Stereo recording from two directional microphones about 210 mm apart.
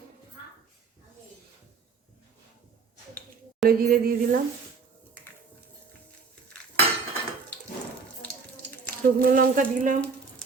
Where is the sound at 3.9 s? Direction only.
45° right (ahead or behind).